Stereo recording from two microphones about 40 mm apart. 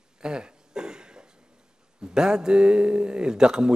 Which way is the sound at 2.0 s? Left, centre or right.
Centre.